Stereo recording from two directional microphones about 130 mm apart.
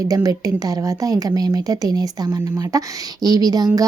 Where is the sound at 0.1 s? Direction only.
25° right (ahead or behind).